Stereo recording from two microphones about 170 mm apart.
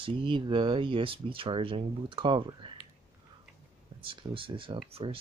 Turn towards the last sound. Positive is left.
turn(degrees=-35)  # may be behind; listen again after turning